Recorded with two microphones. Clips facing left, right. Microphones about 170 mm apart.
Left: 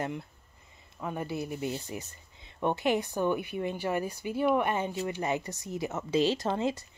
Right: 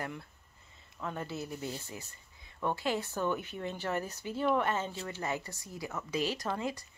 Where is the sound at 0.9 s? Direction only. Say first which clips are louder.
Left 4 dB; 15° left (ahead or behind).